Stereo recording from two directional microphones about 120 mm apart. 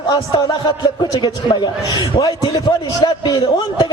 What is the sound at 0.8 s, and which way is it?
A man's voice, 40° left (ahead or behind).